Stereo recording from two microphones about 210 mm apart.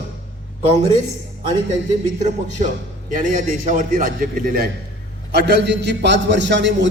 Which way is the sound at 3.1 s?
40° right (ahead or behind).